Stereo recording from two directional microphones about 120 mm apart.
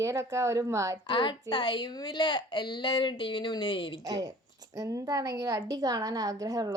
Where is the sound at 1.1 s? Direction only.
45° left (ahead or behind).